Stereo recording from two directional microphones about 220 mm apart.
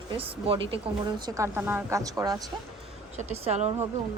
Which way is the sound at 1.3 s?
15° right (ahead or behind).